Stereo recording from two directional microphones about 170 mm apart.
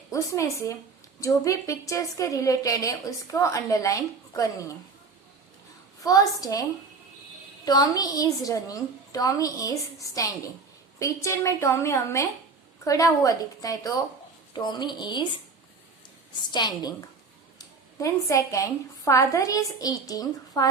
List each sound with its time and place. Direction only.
0.1 s a woman's voice: 20° left (ahead or behind)
6.0 s a woman's voice: 20° left (ahead or behind)
16.5 s a woman's voice: 25° left (ahead or behind)